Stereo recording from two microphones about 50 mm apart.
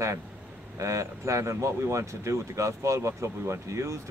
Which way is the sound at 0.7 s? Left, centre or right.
Right.